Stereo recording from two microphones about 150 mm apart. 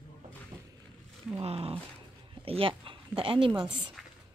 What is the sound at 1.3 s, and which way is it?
A woman's voice, 40° right (ahead or behind).